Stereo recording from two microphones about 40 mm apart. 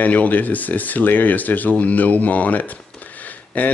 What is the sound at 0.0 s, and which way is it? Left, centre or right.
A man's voice, left.